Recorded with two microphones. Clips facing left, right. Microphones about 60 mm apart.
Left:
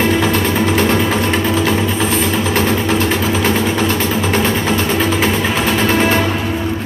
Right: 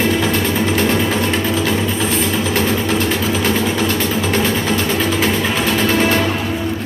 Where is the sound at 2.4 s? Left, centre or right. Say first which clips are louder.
Left 2 dB; left.